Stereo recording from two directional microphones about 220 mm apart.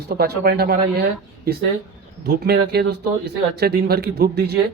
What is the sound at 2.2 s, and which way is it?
Speech, 45° right (ahead or behind).